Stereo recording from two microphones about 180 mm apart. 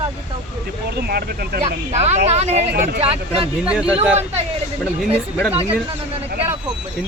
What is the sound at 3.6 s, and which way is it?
Speech, 5° right (ahead or behind).